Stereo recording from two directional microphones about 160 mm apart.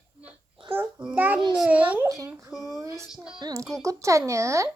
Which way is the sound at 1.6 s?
10° right (ahead or behind).